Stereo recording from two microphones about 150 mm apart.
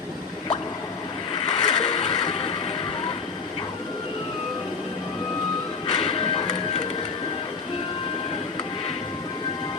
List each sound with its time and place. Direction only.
1.5 s vehicle: 35° left (ahead or behind)
5.9 s music: 35° left (ahead or behind)